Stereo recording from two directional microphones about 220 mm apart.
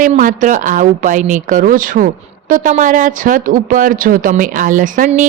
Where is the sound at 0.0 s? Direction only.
35° right (ahead or behind).